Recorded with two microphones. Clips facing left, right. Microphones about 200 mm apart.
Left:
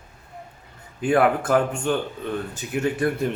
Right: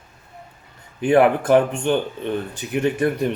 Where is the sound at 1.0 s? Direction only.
20° right (ahead or behind).